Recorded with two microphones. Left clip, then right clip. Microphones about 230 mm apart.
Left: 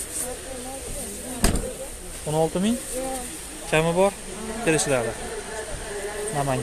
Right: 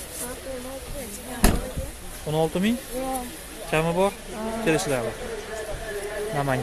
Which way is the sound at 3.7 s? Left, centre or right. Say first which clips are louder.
Left 2 dB; centre.